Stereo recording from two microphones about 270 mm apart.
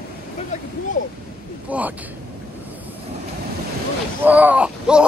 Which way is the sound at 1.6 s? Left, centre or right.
Centre.